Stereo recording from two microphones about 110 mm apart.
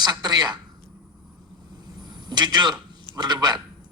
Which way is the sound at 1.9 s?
40° right (ahead or behind).